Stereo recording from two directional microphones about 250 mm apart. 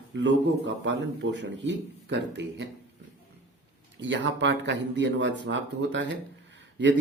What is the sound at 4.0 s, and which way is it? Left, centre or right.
A man's voice, right.